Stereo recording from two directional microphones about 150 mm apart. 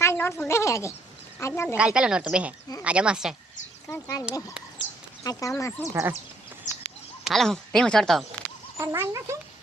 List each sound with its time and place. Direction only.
0.0 s a woman's voice: 15° left (ahead or behind)
1.7 s speech: 5° right (ahead or behind)
3.8 s speech: 20° left (ahead or behind)
5.2 s speech: 25° left (ahead or behind)
5.9 s a child's voice: 20° right (ahead or behind)
7.3 s speech: centre (ahead or behind)
8.8 s a child's voice: 20° right (ahead or behind)